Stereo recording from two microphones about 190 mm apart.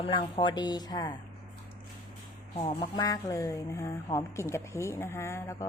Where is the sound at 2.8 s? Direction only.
20° left (ahead or behind).